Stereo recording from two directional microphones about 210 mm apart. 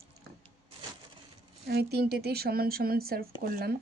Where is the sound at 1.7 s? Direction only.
50° right (ahead or behind).